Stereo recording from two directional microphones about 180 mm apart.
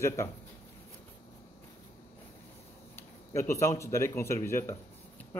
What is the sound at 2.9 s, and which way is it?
Speech, 15° left (ahead or behind).